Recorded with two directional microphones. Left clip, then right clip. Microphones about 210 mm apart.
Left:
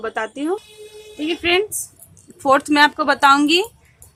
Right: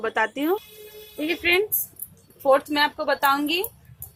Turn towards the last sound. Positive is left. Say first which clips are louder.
# left 8 dB
turn(degrees=30)  # may be behind; listen again after turning